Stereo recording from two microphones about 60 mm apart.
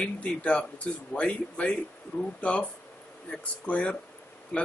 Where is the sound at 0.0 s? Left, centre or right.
Centre.